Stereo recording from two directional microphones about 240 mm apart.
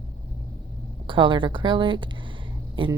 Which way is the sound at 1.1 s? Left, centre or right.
Centre.